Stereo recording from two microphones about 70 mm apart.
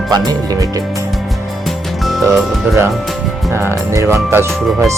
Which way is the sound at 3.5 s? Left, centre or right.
Right.